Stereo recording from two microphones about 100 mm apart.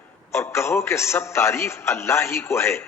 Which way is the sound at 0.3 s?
25° left (ahead or behind).